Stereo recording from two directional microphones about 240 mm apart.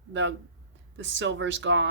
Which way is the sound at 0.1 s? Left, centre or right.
Right.